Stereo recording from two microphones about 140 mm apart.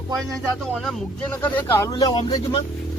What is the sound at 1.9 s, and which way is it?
Speech, 30° left (ahead or behind).